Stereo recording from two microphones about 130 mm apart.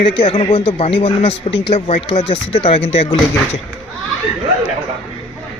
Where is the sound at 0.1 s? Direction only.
45° left (ahead or behind).